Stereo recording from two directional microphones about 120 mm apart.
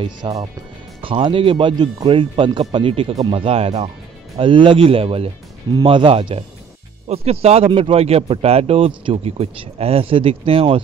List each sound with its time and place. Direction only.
0.0 s speech: 35° right (ahead or behind)
1.0 s speech: 45° right (ahead or behind)